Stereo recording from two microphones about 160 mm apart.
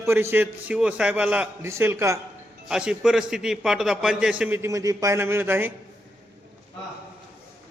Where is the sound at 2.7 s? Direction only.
5° right (ahead or behind).